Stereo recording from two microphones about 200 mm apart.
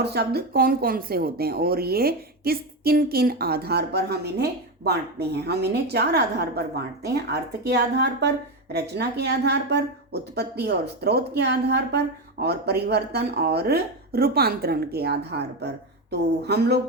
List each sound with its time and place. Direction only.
0.0 s a woman's voice: 55° right (ahead or behind)